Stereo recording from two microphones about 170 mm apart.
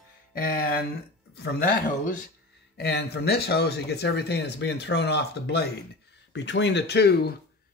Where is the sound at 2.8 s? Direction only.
70° left (ahead or behind).